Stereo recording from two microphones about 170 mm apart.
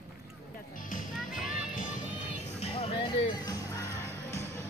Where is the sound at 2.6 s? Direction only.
35° left (ahead or behind); by 4.0 s 15° left (ahead or behind).